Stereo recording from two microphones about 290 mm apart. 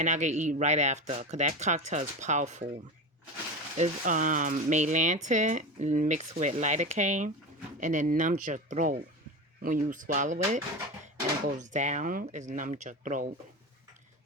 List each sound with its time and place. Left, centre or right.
0.0 s speech: right
3.8 s speech: right